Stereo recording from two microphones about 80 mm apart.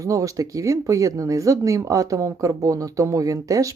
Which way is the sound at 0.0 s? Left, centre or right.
Right.